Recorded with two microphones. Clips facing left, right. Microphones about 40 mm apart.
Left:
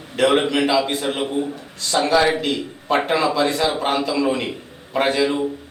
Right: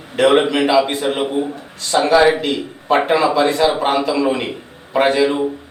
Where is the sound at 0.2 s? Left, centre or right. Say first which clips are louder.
Right 4 dB; centre.